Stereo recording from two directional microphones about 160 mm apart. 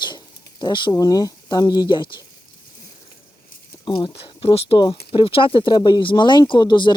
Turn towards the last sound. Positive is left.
turn(degrees=30)  # may be behind; listen again after turning